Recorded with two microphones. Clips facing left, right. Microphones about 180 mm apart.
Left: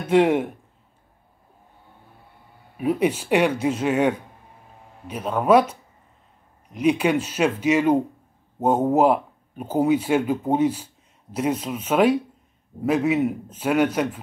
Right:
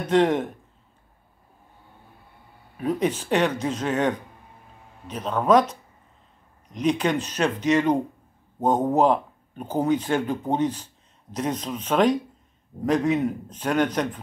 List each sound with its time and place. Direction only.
0.0 s speech: 10° left (ahead or behind)
2.8 s speech: 10° left (ahead or behind)